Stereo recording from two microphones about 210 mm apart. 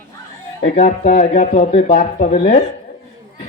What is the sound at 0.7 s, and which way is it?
Speech, 35° left (ahead or behind).